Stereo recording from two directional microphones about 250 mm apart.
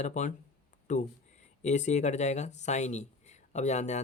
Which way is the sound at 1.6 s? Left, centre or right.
Left.